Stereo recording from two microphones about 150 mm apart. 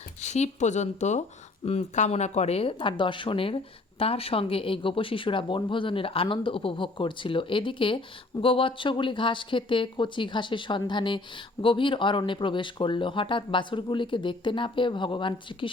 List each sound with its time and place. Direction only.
0.2 s speech: 50° left (ahead or behind); by 15.7 s 35° left (ahead or behind)